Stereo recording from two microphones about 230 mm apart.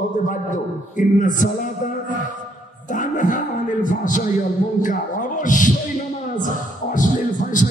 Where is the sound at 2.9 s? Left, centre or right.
Left.